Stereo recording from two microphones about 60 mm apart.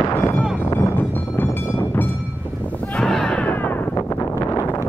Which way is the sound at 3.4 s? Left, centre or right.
Left.